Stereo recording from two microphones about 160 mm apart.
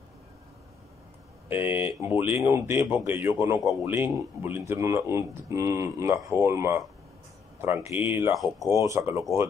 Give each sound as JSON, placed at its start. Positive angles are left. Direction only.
{"t": 1.5, "sound": "speech", "side_deg": -10}